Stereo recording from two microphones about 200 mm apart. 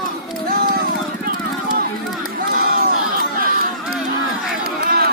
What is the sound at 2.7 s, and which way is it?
Crowd, 45° right (ahead or behind).